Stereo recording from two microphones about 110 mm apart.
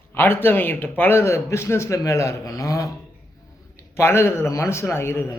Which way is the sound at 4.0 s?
25° left (ahead or behind).